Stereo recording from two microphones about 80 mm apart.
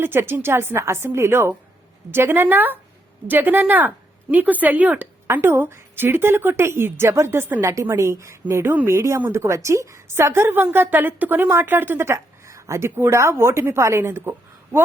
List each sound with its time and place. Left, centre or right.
0.0 s a woman's voice: right